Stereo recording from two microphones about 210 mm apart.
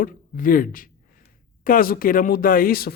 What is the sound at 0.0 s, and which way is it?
A man's voice, 40° left (ahead or behind).